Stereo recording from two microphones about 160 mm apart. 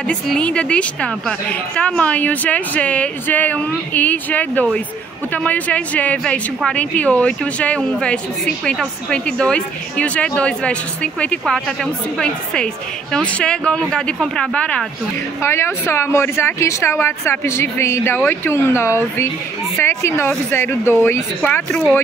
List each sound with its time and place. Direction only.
0.1 s a woman's voice: 5° left (ahead or behind)